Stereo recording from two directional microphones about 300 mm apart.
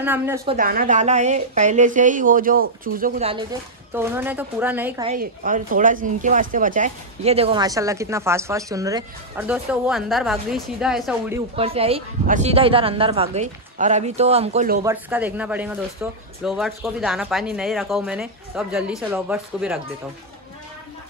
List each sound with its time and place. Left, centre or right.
0.0 s speech: centre
0.5 s speech: right
3.9 s speech: centre
5.0 s speech: right; by 11.4 s centre
11.5 s speech: centre
14.9 s speech: centre